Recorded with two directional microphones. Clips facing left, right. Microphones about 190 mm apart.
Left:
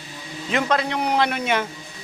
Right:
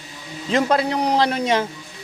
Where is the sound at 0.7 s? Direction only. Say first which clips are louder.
Right 3 dB; 35° right (ahead or behind).